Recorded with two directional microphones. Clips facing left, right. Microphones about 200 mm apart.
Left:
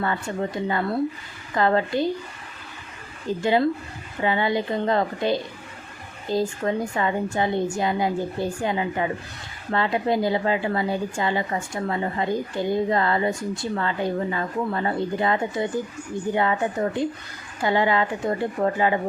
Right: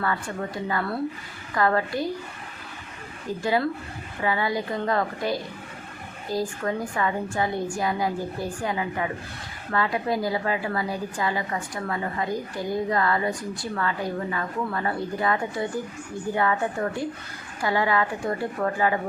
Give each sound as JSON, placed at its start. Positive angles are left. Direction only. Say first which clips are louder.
{"t": 0.0, "sound": "a woman's voice", "louder": "left 3 dB", "side_deg": 25}
{"t": 3.4, "sound": "a woman's voice", "louder": "left 4 dB", "side_deg": 25}